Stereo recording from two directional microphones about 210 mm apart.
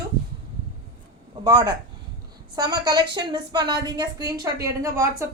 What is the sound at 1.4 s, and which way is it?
A woman's voice, 20° right (ahead or behind).